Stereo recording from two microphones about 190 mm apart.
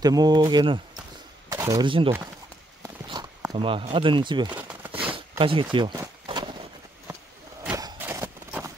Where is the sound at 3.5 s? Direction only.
25° right (ahead or behind).